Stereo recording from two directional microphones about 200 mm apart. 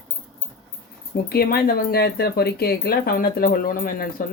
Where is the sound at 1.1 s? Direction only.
50° left (ahead or behind).